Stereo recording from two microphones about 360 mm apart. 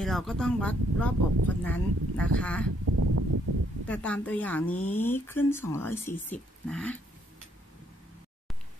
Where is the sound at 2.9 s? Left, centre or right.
Right.